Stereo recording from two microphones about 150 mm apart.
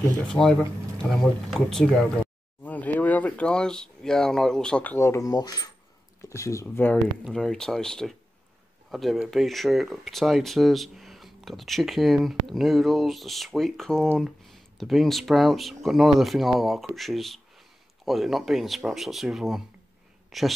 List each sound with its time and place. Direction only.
0.3 s speech: 5° left (ahead or behind)
7.2 s speech: 5° left (ahead or behind)
20.2 s a sound: centre (ahead or behind)